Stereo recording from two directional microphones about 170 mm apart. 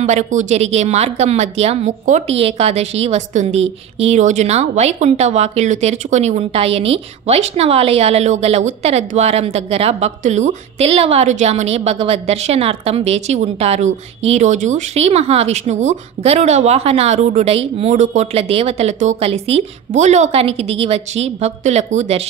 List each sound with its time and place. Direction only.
0.0 s a woman's voice: 45° right (ahead or behind)